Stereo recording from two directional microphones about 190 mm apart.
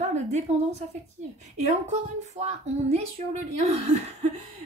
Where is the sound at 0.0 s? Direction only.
35° right (ahead or behind).